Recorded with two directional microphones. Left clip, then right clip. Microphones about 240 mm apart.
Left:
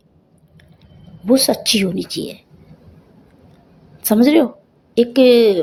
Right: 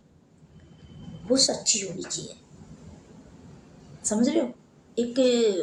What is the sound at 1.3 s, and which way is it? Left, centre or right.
Speech, left.